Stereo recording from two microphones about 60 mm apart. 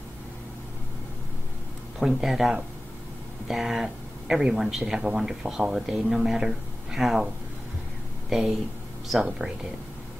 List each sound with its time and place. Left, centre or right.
2.0 s speech: centre
8.3 s speech: centre